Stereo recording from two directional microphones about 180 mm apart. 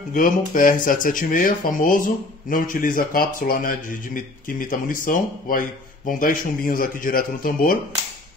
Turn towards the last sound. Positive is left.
turn(degrees=50)  # may be behind; listen again after turning